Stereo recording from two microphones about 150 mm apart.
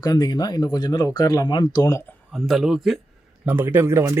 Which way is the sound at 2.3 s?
Centre (ahead or behind).